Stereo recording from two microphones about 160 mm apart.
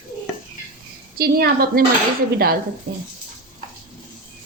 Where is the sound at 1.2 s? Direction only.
75° right (ahead or behind).